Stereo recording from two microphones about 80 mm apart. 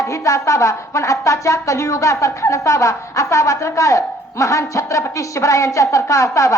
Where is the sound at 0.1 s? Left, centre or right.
Left.